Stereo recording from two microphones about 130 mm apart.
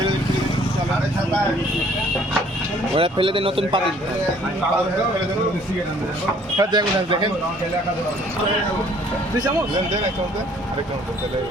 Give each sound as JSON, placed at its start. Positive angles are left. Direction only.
{"t": 2.9, "sound": "speech", "side_deg": -40}
{"t": 6.6, "sound": "speech", "side_deg": -35}